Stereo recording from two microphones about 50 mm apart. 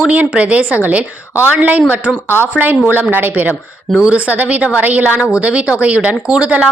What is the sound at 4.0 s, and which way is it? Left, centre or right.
A woman's voice, right.